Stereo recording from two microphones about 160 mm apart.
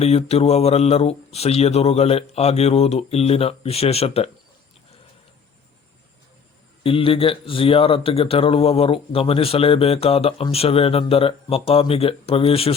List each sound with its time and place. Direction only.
0.0 s speech: 40° left (ahead or behind)
6.8 s speech: 35° left (ahead or behind)